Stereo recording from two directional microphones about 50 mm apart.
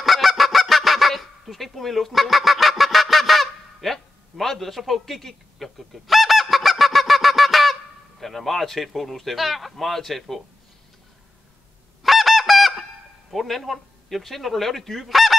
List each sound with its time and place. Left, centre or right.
0.0 s goose: centre
8.2 s a man's voice: centre
12.0 s goose: centre
13.3 s speech: centre